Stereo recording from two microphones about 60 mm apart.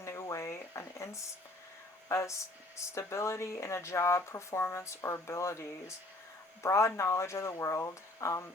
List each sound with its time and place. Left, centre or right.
0.0 s a sound: left
2.0 s speech: left
6.6 s speech: left